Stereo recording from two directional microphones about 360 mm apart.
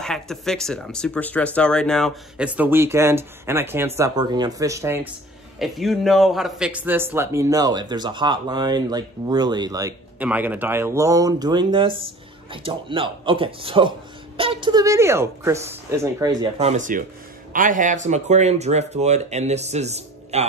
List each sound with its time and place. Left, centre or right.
0.0 s speech: centre